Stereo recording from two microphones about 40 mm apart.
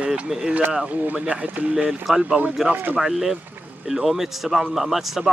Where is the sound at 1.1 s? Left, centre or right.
Right.